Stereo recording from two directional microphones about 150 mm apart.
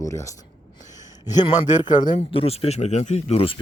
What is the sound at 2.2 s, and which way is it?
Speech, 40° left (ahead or behind).